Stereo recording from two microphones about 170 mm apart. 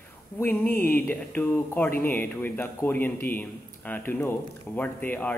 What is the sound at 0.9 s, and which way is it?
Speech, 10° left (ahead or behind).